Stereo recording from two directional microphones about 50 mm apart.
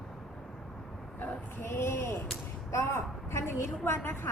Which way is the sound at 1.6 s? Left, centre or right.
Left.